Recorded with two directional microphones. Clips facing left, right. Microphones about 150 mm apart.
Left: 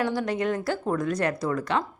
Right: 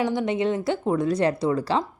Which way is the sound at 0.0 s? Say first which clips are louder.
Right 3 dB; 20° right (ahead or behind).